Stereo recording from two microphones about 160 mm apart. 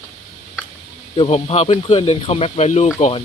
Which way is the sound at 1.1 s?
40° left (ahead or behind).